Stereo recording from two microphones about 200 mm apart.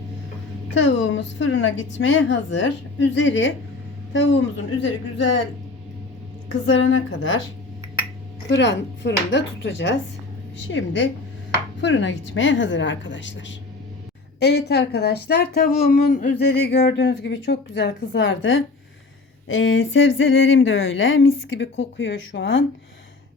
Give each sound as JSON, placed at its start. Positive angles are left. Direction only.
{"t": 0.7, "sound": "speech", "side_deg": 65}
{"t": 6.7, "sound": "speech", "side_deg": 70}
{"t": 8.4, "sound": "speech", "side_deg": 65}